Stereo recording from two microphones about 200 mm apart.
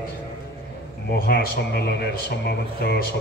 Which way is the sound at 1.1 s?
55° left (ahead or behind).